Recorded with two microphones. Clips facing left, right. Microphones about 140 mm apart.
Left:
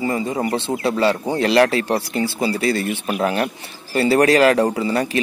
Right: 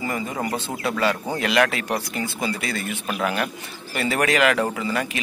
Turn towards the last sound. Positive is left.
turn(degrees=35)  # may be behind; listen again after turning